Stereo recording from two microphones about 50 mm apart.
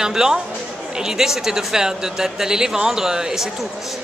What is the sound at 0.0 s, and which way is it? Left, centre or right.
Speech, centre.